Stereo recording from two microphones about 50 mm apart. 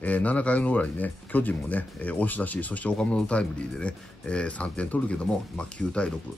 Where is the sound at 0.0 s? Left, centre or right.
Left.